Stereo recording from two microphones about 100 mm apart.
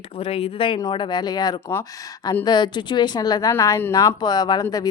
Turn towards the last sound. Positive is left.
turn(degrees=40)  # may be behind; listen again after turning